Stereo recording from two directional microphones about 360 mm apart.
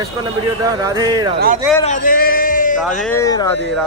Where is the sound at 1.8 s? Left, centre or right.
Left.